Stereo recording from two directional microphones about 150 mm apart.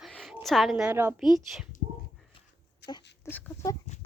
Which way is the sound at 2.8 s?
90° left.